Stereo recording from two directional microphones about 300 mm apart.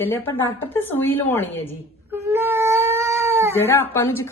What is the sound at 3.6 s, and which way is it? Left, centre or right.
Speech, centre.